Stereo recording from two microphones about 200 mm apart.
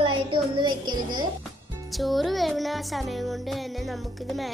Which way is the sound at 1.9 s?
Centre (ahead or behind).